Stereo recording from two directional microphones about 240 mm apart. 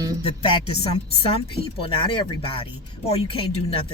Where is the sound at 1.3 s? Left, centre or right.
Left.